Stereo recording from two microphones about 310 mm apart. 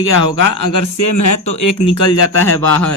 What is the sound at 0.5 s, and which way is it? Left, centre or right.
Speech, left.